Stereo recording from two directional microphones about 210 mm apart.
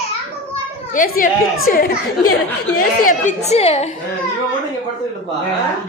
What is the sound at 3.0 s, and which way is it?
Speech, 35° left (ahead or behind).